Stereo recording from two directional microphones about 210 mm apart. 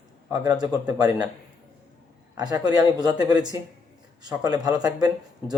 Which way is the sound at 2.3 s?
20° right (ahead or behind).